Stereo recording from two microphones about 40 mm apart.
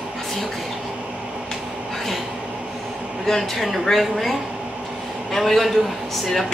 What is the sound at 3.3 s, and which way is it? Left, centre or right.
Speech, centre.